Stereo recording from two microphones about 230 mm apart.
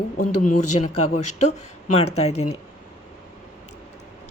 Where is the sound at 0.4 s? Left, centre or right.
Left.